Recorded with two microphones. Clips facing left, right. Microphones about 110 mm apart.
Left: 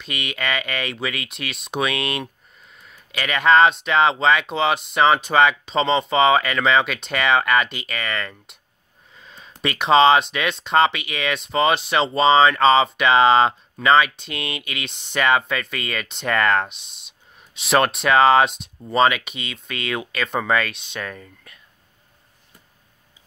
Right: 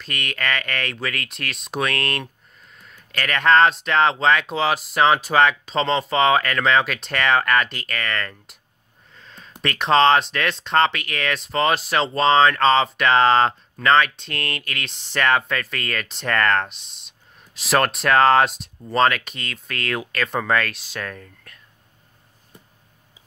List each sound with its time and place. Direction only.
0.0 s speech: 5° left (ahead or behind)
9.1 s a sound: 5° left (ahead or behind)
9.6 s speech: 5° left (ahead or behind)